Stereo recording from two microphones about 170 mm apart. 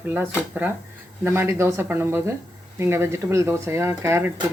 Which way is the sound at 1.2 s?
15° right (ahead or behind).